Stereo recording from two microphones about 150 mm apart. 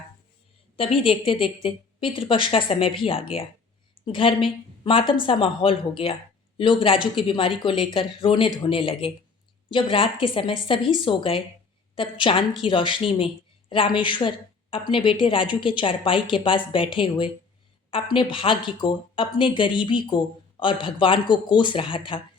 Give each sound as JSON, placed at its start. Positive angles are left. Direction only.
{"t": 0.8, "sound": "a woman's voice", "side_deg": 35}